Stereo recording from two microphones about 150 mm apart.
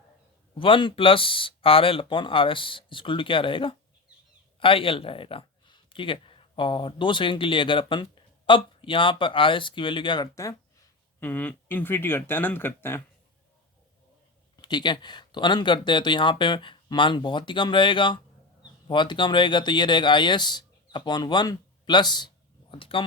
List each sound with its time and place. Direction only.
0.6 s speech: 35° left (ahead or behind)
11.2 s speech: 10° left (ahead or behind)
14.5 s speech: 30° left (ahead or behind)